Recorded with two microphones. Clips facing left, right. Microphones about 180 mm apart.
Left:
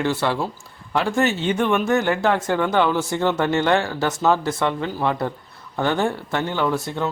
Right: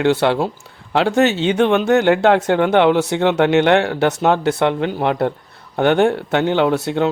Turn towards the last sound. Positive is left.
turn(degrees=-70)  # may be behind; listen again after turning